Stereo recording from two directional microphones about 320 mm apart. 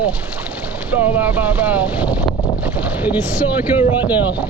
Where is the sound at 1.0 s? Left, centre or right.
Centre.